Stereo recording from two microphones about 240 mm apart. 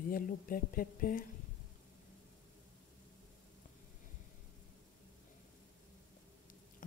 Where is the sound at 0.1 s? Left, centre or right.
Left.